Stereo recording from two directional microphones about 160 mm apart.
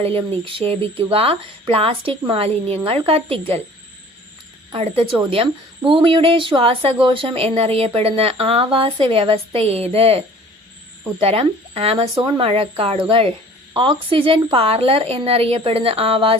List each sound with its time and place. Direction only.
0.0 s speech: 35° right (ahead or behind)
4.7 s speech: 35° right (ahead or behind)